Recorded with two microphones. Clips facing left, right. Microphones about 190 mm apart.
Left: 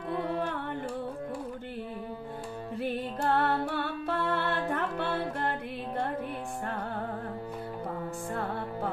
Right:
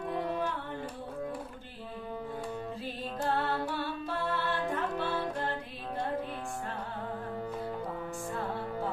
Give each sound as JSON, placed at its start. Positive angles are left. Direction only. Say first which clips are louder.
{"t": 2.8, "sound": "music", "louder": "left 6 dB", "side_deg": 60}